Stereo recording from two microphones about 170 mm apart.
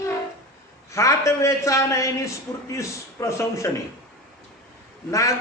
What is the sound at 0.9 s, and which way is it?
A man's voice, 20° left (ahead or behind).